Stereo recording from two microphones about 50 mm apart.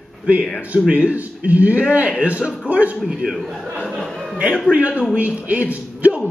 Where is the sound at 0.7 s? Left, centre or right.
Right.